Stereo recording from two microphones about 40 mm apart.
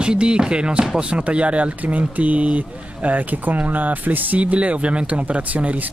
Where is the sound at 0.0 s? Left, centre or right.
Right.